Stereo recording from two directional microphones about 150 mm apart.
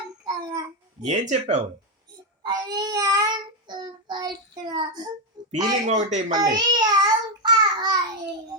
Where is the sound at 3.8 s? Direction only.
30° right (ahead or behind).